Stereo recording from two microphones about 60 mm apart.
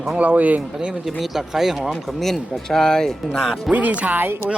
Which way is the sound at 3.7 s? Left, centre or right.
Right.